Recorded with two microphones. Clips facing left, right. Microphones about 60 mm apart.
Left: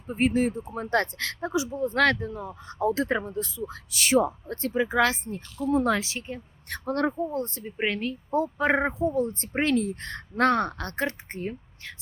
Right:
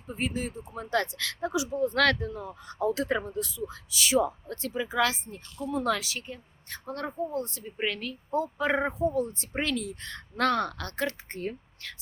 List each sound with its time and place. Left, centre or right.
0.1 s a woman's voice: left
3.9 s a woman's voice: left
6.7 s a woman's voice: left
7.3 s a woman's voice: left
11.3 s speech: centre